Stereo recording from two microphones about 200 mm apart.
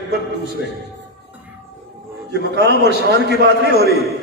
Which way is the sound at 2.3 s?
55° right (ahead or behind).